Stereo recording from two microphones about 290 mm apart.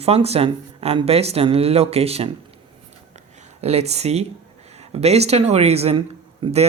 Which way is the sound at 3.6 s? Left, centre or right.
Right.